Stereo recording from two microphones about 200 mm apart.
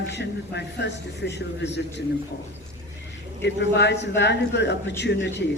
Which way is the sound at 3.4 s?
60° left (ahead or behind).